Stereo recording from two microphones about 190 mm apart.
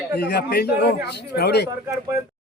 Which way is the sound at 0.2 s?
60° left (ahead or behind).